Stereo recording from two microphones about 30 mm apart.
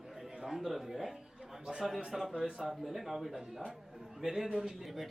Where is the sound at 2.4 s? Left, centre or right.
Centre.